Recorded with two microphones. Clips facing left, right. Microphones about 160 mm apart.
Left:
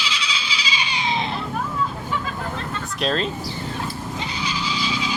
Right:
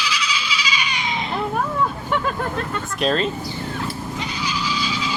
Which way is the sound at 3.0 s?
Centre (ahead or behind).